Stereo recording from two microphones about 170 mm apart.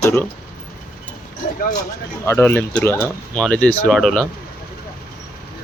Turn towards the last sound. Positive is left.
turn(degrees=5)  # may be behind; listen again after turning